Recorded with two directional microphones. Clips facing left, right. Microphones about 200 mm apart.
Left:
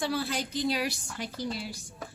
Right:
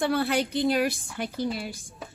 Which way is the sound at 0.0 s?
60° right (ahead or behind).